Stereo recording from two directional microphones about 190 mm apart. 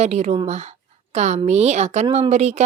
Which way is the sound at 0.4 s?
35° right (ahead or behind).